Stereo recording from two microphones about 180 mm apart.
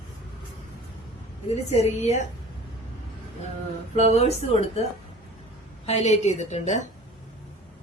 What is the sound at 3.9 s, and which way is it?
Speech, 35° left (ahead or behind).